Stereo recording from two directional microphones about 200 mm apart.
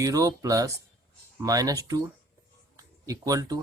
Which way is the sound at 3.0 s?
15° right (ahead or behind).